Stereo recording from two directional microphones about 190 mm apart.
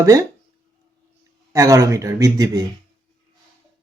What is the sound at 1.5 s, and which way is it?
Speech, 15° right (ahead or behind).